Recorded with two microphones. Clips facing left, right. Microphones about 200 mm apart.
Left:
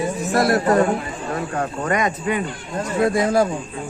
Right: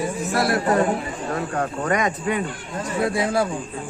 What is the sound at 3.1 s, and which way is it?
Speech, 40° left (ahead or behind).